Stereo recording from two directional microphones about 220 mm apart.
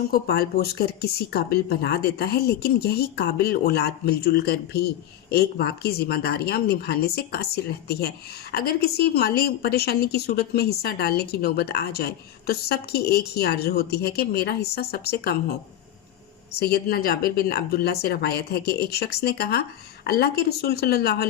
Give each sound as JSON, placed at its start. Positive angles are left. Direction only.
{"t": 0.1, "sound": "speech", "side_deg": 45}
{"t": 16.5, "sound": "speech", "side_deg": 45}